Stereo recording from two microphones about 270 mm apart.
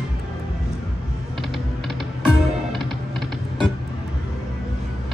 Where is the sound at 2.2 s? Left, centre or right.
Centre.